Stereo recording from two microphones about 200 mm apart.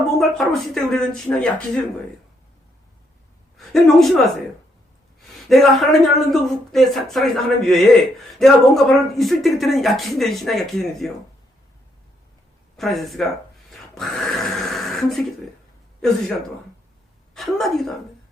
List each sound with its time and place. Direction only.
0.2 s speech: centre (ahead or behind)
3.6 s speech: centre (ahead or behind)
5.5 s speech: centre (ahead or behind)
12.7 s speech: centre (ahead or behind)
17.3 s a woman's voice: centre (ahead or behind)